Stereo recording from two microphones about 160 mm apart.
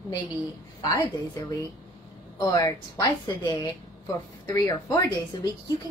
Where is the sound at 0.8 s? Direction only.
20° left (ahead or behind).